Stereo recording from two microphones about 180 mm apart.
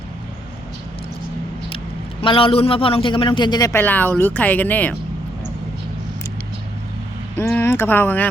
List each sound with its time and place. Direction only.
2.2 s a man's voice: 30° left (ahead or behind); by 4.9 s 10° left (ahead or behind)
7.3 s speech: 15° left (ahead or behind)